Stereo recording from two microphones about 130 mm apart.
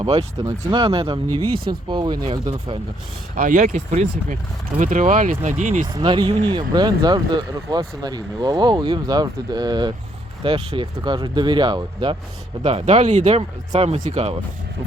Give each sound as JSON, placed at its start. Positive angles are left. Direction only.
{"t": 0.0, "sound": "speech", "side_deg": -45}
{"t": 3.3, "sound": "speech", "side_deg": -90}
{"t": 5.8, "sound": "speech", "side_deg": -35}
{"t": 10.4, "sound": "speech", "side_deg": -45}
{"t": 12.6, "sound": "speech", "side_deg": -55}